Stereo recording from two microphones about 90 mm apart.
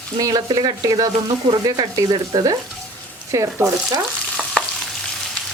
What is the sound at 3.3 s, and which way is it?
Speech, 35° right (ahead or behind).